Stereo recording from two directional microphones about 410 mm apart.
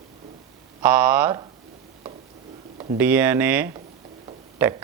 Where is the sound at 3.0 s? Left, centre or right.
Centre.